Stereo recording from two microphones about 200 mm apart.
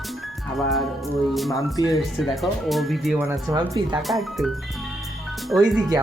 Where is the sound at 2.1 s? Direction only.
Centre (ahead or behind).